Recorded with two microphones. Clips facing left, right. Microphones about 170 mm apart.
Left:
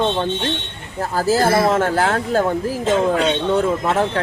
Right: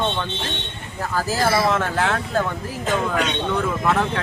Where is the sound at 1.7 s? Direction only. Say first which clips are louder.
Left 4 dB; 40° left (ahead or behind).